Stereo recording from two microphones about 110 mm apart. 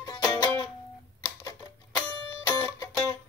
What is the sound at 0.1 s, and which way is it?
Music, 25° left (ahead or behind).